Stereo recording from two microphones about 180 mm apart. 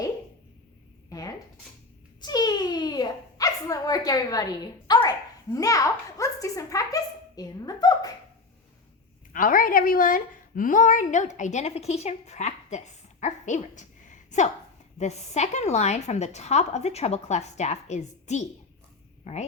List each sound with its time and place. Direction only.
2.2 s a sound: 25° left (ahead or behind)
5.5 s a child's voice: 20° left (ahead or behind)
9.3 s a woman's voice: 50° left (ahead or behind)